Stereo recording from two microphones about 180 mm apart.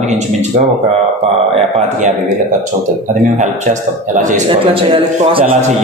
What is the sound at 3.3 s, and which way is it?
A man's voice, 40° right (ahead or behind).